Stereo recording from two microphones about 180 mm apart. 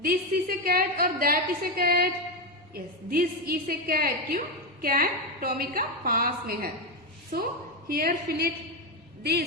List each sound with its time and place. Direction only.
0.0 s a woman's voice: 55° right (ahead or behind)
7.9 s a woman's voice: 55° right (ahead or behind)